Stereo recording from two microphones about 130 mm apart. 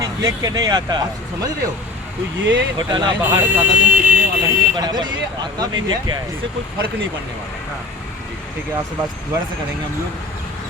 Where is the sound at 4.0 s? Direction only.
10° right (ahead or behind).